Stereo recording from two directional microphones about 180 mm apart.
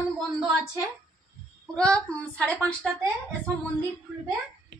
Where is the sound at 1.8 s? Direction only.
5° left (ahead or behind).